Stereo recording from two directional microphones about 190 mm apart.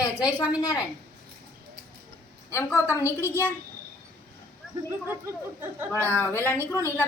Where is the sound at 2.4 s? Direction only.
15° left (ahead or behind).